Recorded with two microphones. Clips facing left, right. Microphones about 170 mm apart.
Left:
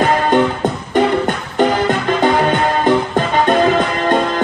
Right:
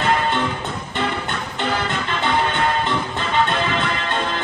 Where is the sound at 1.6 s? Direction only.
45° left (ahead or behind).